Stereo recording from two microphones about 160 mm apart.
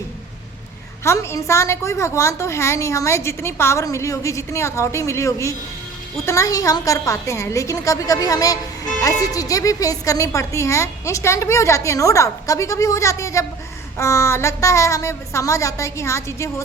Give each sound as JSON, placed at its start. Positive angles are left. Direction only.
{"t": 1.0, "sound": "a woman's voice", "side_deg": 15}